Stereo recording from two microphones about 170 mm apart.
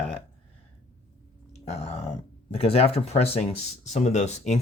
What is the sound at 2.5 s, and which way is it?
Speech, 35° left (ahead or behind).